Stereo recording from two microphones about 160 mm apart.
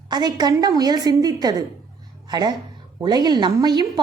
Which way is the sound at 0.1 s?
25° right (ahead or behind).